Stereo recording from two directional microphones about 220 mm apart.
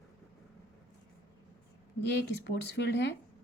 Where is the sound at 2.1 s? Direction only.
50° left (ahead or behind).